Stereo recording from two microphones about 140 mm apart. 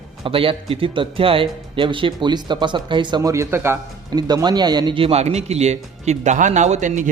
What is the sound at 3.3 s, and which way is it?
Speech, 20° right (ahead or behind).